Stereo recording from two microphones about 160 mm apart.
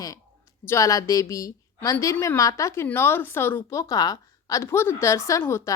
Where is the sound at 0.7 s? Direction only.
20° left (ahead or behind).